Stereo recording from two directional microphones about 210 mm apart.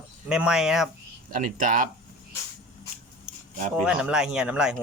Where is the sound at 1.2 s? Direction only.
40° right (ahead or behind).